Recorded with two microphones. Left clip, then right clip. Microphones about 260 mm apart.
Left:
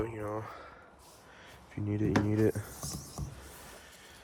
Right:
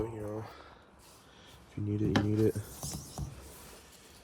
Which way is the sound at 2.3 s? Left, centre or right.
Centre.